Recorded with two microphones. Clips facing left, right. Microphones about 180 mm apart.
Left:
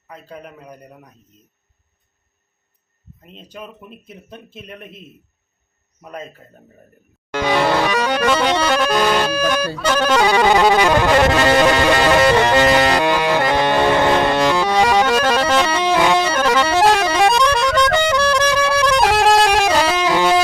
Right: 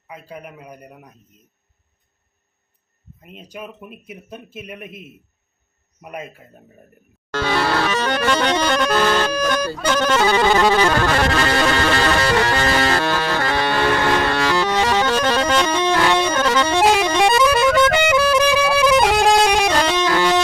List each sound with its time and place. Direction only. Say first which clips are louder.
0.1 s speech: even; 10° right (ahead or behind)
3.2 s speech: right 1 dB; 10° right (ahead or behind)
7.3 s accordion: left 3 dB; 15° left (ahead or behind)
9.8 s music: left 2 dB; 5° left (ahead or behind)